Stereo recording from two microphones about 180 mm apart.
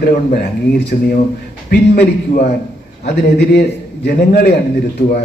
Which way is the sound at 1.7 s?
60° left (ahead or behind).